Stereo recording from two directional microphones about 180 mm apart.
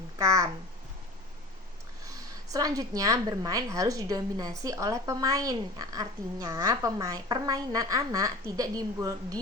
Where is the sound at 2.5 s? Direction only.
20° right (ahead or behind).